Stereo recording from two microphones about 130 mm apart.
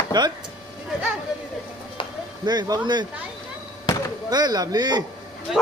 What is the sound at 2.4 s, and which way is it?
Speech, 35° right (ahead or behind).